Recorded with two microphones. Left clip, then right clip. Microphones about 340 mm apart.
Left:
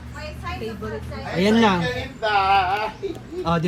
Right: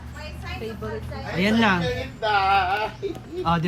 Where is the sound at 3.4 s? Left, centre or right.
Centre.